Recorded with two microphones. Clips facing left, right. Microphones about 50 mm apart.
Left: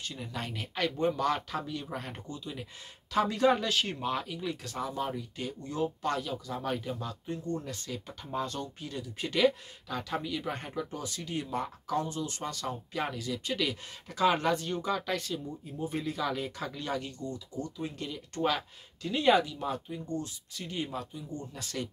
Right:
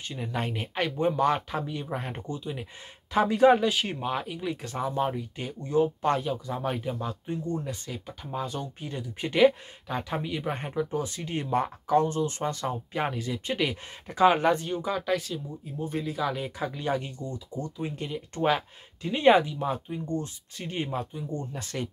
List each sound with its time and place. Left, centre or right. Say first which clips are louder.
0.0 s speech: right 6 dB; right; by 8.6 s centre
8.8 s speech: right 3 dB; right
14.7 s speech: right 4 dB; centre; by 21.8 s right